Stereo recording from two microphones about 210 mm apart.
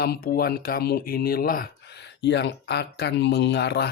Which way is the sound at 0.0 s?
45° left (ahead or behind).